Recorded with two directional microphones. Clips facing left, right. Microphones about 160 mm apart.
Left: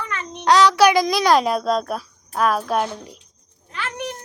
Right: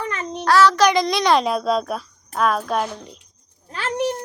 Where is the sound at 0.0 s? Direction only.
30° right (ahead or behind).